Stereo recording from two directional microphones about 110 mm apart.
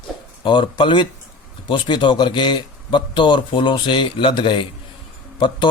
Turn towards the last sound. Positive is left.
turn(degrees=45)  # may be behind; listen again after turning